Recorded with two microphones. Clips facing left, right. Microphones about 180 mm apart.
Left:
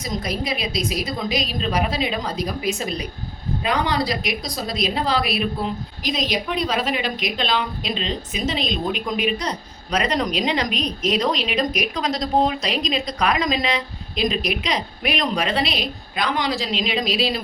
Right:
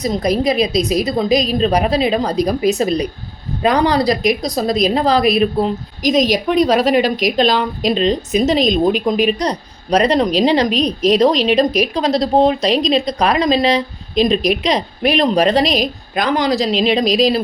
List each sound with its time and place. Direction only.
0.0 s a woman's voice: 35° right (ahead or behind)